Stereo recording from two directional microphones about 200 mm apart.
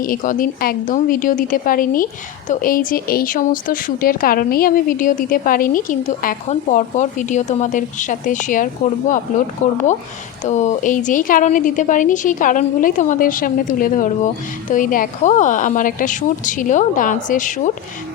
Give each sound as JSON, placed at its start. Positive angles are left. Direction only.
{"t": 0.0, "sound": "a woman's voice", "side_deg": 45}